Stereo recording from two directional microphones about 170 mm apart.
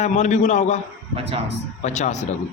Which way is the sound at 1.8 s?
45° left (ahead or behind).